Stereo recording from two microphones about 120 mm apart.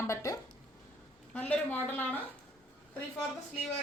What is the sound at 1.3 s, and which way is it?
Speech, 10° left (ahead or behind).